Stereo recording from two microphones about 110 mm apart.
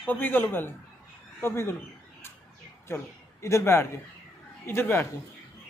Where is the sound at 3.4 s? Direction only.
25° left (ahead or behind).